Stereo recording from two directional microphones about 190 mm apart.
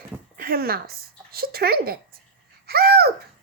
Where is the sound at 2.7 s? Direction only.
55° right (ahead or behind).